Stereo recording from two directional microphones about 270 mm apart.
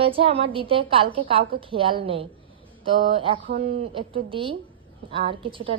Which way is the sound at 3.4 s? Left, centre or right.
Right.